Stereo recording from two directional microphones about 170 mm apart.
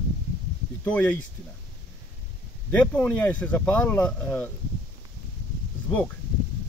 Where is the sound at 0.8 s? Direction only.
10° left (ahead or behind).